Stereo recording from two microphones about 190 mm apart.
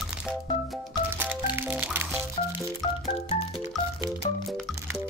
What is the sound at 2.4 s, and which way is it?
Music, 30° left (ahead or behind).